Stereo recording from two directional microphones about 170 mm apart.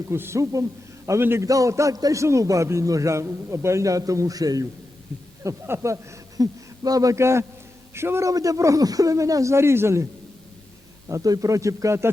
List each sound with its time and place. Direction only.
0.1 s a man's voice: 15° right (ahead or behind)
11.1 s speech: 20° right (ahead or behind)